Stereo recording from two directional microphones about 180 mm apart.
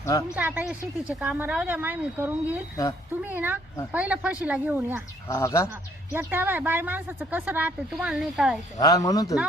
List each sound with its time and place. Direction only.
0.0 s speech: 15° left (ahead or behind)
0.3 s speech: 10° right (ahead or behind)
5.3 s speech: 15° left (ahead or behind)
6.1 s speech: 10° right (ahead or behind)
8.8 s speech: 20° left (ahead or behind)